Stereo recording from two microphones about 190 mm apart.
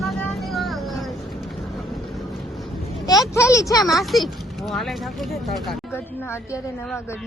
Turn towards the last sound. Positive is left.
turn(degrees=0)  # may be behind; listen again after turning